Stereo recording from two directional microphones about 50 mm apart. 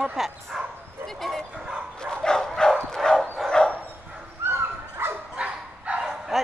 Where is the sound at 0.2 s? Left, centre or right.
Centre.